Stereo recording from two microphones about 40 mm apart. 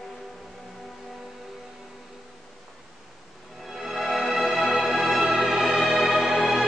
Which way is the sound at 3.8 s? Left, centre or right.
Centre.